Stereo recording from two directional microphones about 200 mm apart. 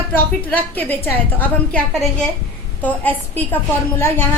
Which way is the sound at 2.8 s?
10° left (ahead or behind).